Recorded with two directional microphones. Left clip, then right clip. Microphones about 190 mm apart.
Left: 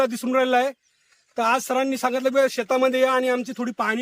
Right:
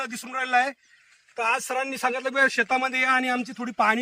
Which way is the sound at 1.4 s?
75° left (ahead or behind).